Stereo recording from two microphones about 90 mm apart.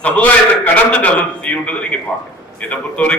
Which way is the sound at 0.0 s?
15° left (ahead or behind).